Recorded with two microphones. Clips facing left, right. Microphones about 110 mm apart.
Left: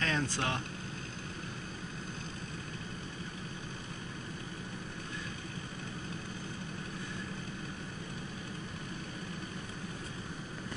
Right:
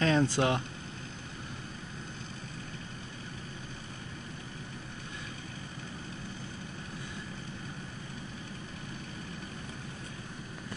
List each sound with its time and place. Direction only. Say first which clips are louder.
0.0 s speech: right 7 dB; 20° right (ahead or behind)